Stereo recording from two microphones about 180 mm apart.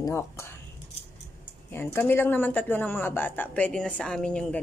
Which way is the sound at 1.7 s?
15° left (ahead or behind).